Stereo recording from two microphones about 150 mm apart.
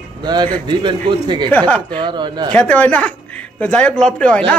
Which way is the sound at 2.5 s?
10° left (ahead or behind).